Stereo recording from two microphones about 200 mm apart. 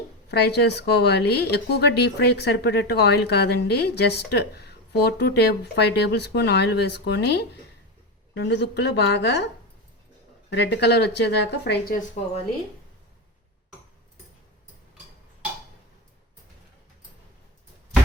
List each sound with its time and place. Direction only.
0.3 s speech: 55° left (ahead or behind)
10.5 s speech: 55° left (ahead or behind)